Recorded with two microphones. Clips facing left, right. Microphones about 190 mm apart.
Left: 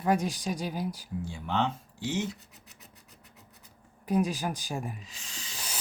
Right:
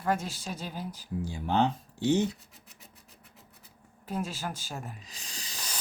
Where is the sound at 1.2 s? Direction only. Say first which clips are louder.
Right 3 dB; 40° right (ahead or behind).